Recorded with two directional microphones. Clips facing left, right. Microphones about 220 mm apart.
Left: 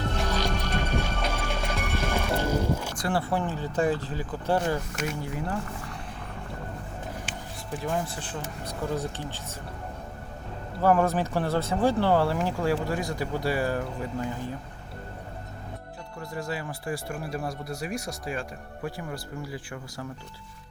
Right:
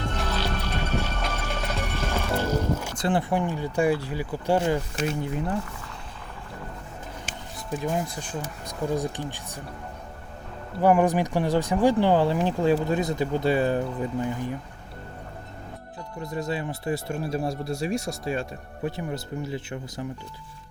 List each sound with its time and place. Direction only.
0.3 s music: 15° left (ahead or behind)
3.0 s speech: 20° right (ahead or behind)
4.9 s speech: 25° right (ahead or behind)
7.7 s speech: 20° right (ahead or behind)
10.8 s speech: 15° right (ahead or behind)
16.2 s speech: 20° right (ahead or behind)